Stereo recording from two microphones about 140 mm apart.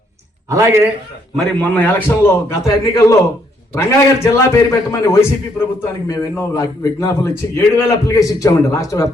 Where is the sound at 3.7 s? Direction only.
20° left (ahead or behind).